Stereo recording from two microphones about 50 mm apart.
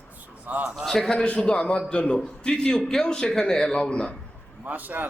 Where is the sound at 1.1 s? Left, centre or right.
Left.